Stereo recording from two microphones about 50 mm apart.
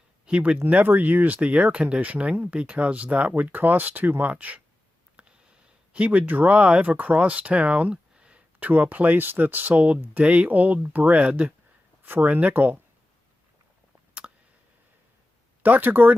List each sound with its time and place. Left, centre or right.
0.3 s speech: right
0.7 s speech: right
12.0 s speech: right
14.1 s a sound: right
15.6 s speech: right